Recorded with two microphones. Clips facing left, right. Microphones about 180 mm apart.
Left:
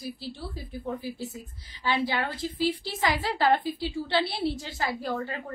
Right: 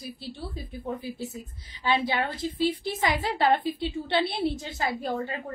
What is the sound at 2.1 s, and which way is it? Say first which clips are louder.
A woman's voice: right 2 dB; 20° right (ahead or behind).